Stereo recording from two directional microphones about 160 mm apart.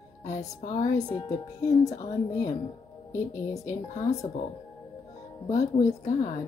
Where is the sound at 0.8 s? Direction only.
25° left (ahead or behind).